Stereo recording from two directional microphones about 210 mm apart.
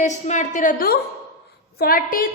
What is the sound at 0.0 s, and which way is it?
A woman's voice, 35° left (ahead or behind).